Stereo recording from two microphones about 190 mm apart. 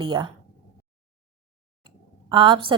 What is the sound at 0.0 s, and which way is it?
Speech, 25° right (ahead or behind).